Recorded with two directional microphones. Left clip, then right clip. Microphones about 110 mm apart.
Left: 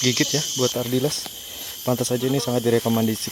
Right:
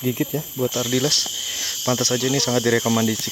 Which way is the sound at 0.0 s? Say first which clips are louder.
Left 4 dB; 15° right (ahead or behind).